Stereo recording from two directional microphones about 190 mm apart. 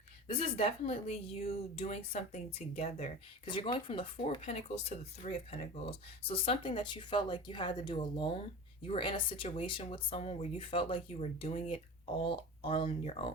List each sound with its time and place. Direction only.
0.3 s speech: 30° left (ahead or behind)